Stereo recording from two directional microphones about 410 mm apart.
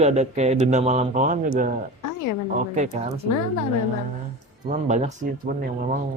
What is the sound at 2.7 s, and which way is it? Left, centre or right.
Speech, centre.